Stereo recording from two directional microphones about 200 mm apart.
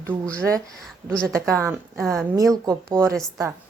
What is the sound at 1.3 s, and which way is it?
Speech, 15° right (ahead or behind).